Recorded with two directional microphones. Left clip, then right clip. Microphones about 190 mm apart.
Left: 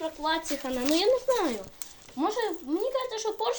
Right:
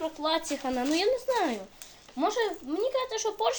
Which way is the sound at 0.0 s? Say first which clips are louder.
Even; 10° right (ahead or behind).